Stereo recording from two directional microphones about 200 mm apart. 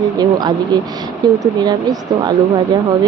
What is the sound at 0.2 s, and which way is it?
Speech, 20° right (ahead or behind).